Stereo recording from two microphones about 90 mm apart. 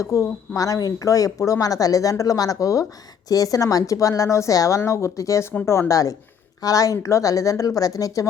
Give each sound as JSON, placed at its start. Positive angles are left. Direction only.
{"t": 0.0, "sound": "speech", "side_deg": 35}